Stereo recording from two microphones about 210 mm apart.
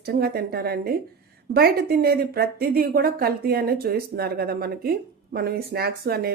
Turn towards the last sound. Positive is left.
turn(degrees=-45)  # may be behind; listen again after turning